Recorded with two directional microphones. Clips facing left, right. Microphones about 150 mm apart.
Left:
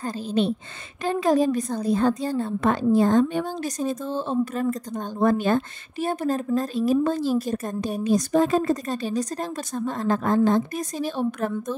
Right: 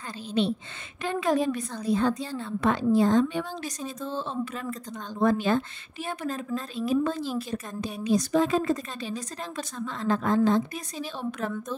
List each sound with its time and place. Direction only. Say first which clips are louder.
0.3 s a woman's voice: left 2 dB; 45° left (ahead or behind)